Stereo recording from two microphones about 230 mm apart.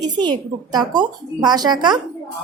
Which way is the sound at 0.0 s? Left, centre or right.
Centre.